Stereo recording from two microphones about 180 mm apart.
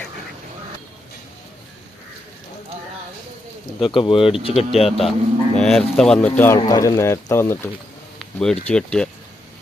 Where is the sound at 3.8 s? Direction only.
25° left (ahead or behind).